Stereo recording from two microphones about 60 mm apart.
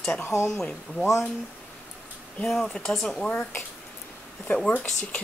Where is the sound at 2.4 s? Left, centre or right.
Centre.